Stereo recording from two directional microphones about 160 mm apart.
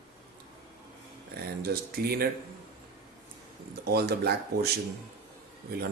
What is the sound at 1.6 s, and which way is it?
Speech, 75° right (ahead or behind).